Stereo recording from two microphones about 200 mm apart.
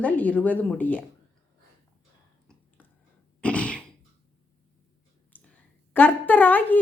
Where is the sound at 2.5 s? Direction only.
5° left (ahead or behind).